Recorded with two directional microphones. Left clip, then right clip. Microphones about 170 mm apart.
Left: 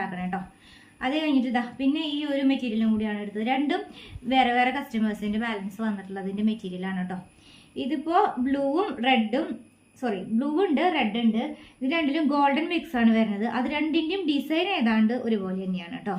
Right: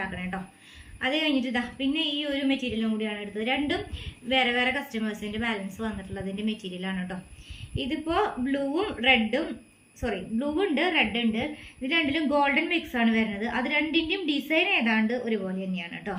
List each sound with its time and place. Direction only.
0.0 s a sound: 45° left (ahead or behind)
1.0 s a woman's voice: 45° left (ahead or behind); by 11.4 s 25° left (ahead or behind)
11.8 s a woman's voice: 40° left (ahead or behind)